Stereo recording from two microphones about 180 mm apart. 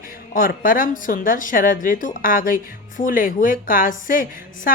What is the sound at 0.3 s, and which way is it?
A woman's voice, 50° left (ahead or behind).